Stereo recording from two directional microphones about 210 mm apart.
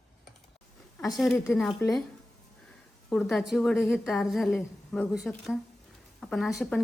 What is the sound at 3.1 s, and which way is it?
Speech, 5° left (ahead or behind).